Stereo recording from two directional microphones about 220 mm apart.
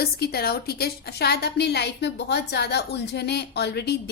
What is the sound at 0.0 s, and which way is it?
A woman's voice, 45° left (ahead or behind).